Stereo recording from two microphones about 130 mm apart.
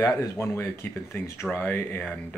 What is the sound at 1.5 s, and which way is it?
Speech, 15° left (ahead or behind).